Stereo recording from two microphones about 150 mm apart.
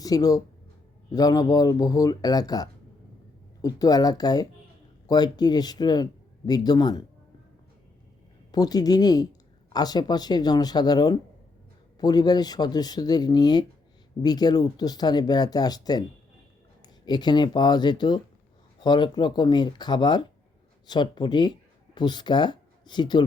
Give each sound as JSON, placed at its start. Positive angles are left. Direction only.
{"t": 0.0, "sound": "speech", "side_deg": 25}
{"t": 8.5, "sound": "speech", "side_deg": 25}